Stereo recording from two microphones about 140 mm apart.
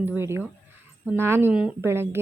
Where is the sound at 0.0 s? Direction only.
15° right (ahead or behind).